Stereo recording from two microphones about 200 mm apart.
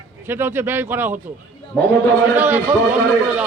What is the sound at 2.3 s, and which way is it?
Speech, 10° right (ahead or behind).